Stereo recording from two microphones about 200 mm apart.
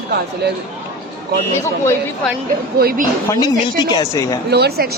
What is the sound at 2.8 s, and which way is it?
Speech, 50° right (ahead or behind).